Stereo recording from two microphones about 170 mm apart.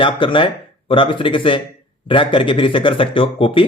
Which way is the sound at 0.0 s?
30° left (ahead or behind).